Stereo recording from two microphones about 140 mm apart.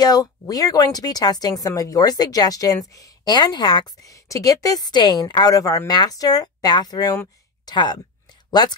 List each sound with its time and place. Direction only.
0.0 s a woman's voice: 25° left (ahead or behind)
4.0 s a woman's voice: 25° left (ahead or behind)